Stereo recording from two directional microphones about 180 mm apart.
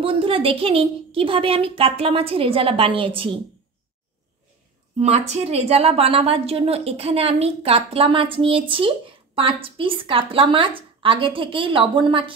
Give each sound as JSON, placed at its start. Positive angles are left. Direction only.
{"t": 0.0, "sound": "a woman's voice", "side_deg": -30}
{"t": 4.9, "sound": "a woman's voice", "side_deg": -35}